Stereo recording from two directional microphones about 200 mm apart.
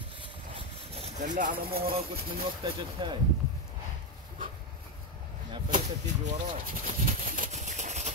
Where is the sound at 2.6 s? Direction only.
20° right (ahead or behind).